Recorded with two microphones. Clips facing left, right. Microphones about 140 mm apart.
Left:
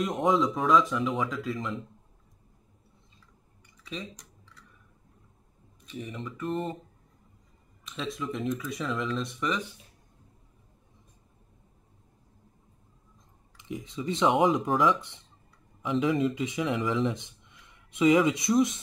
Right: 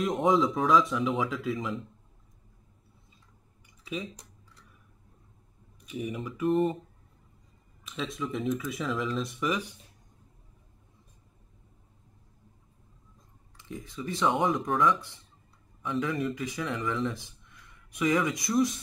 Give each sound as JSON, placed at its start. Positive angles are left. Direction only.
{"t": 0.0, "sound": "speech", "side_deg": 0}
{"t": 3.8, "sound": "speech", "side_deg": -5}
{"t": 5.9, "sound": "speech", "side_deg": -10}
{"t": 7.8, "sound": "speech", "side_deg": 0}
{"t": 13.6, "sound": "speech", "side_deg": 20}